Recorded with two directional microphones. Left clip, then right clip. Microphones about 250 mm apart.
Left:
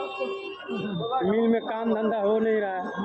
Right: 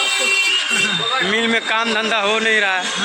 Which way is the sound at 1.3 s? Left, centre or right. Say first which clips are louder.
Right 8 dB; right.